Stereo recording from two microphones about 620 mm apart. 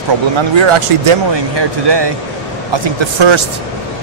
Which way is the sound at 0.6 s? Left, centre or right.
Right.